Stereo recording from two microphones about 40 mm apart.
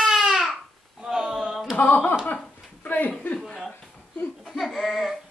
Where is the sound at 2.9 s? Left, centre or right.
Left.